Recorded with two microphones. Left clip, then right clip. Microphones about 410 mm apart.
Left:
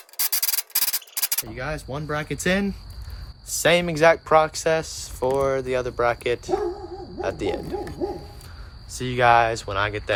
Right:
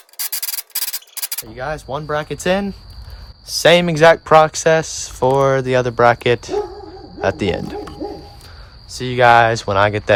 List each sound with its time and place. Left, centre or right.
0.2 s rub: centre
1.6 s speech: centre
8.9 s speech: right